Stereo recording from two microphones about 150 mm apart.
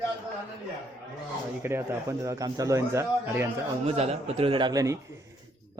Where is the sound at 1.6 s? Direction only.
15° right (ahead or behind).